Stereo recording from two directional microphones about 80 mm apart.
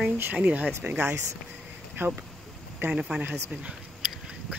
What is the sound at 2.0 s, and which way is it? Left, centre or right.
Speech, right.